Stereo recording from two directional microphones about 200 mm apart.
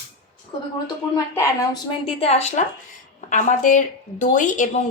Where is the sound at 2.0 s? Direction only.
30° left (ahead or behind).